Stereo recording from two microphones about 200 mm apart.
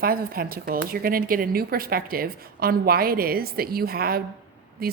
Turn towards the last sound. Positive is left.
turn(degrees=-50)  # may be behind; listen again after turning